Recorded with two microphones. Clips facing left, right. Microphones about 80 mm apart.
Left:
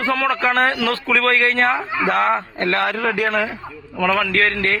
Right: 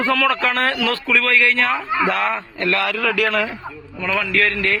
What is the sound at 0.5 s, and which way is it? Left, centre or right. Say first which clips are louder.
A man's voice: left 2 dB; left.